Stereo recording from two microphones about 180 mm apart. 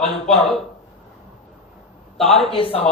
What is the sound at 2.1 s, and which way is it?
Speech, centre (ahead or behind).